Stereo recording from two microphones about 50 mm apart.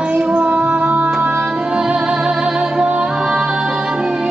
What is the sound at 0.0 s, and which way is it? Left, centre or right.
Music, centre.